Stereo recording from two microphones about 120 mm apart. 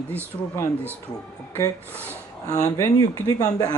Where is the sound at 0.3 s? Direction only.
30° left (ahead or behind).